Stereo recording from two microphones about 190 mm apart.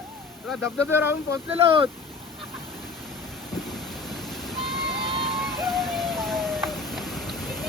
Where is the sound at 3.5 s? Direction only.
Centre (ahead or behind).